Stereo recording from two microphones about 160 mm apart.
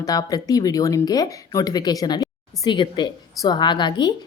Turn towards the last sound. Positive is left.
turn(degrees=25)  # may be behind; listen again after turning